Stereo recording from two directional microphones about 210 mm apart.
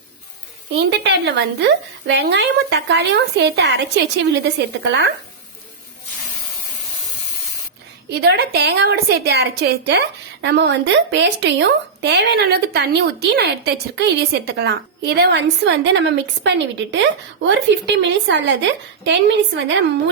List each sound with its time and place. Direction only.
0.8 s speech: 55° right (ahead or behind)
8.1 s a woman's voice: 50° right (ahead or behind)